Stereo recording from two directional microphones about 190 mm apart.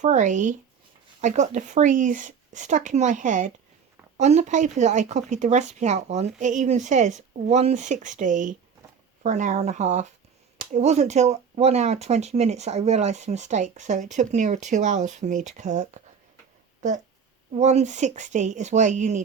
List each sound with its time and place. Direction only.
0.0 s speech: 40° right (ahead or behind)
17.5 s speech: 35° right (ahead or behind)